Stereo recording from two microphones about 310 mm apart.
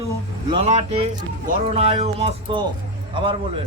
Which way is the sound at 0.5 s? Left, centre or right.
Centre.